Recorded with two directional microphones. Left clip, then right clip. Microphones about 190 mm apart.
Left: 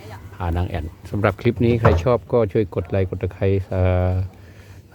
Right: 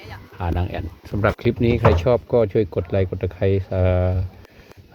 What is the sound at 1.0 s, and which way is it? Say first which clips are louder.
Speech: even; 10° left (ahead or behind).